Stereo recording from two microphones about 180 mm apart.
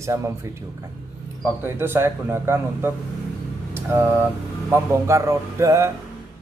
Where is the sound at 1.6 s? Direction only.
10° right (ahead or behind).